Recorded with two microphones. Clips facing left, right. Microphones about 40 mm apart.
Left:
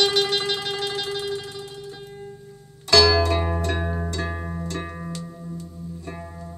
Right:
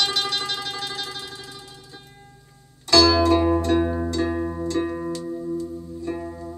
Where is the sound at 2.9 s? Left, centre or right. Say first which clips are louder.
Right 1 dB; left.